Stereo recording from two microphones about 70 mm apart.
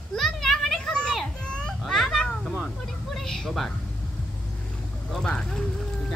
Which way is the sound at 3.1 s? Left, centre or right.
Centre.